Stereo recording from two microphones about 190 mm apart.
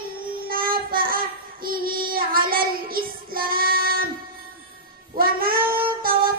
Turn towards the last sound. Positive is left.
turn(degrees=-50)  # may be behind; listen again after turning